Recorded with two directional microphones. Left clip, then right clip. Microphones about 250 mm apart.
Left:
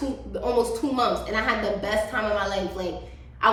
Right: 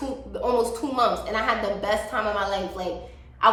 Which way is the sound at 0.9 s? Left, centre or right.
Centre.